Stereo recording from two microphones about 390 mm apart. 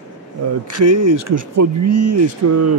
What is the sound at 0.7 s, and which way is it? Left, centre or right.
Speech, right.